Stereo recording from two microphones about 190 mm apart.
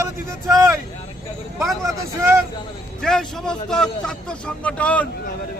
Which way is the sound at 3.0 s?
Centre (ahead or behind).